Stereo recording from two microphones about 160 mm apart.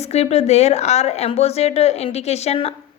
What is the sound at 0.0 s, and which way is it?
A woman's voice, 40° left (ahead or behind).